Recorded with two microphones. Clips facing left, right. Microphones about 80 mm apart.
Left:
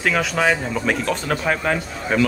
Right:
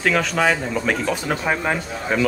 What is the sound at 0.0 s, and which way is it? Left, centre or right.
Speech, centre.